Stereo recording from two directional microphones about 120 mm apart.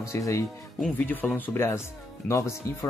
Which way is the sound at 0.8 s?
10° left (ahead or behind).